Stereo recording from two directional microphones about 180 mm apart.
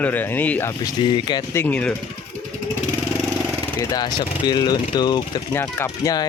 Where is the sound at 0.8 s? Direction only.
25° left (ahead or behind); by 1.9 s 10° left (ahead or behind).